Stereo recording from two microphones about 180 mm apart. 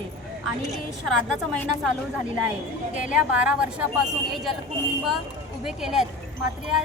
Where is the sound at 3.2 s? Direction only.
10° right (ahead or behind).